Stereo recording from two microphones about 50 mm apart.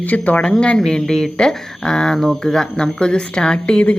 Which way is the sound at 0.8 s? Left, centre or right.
Centre.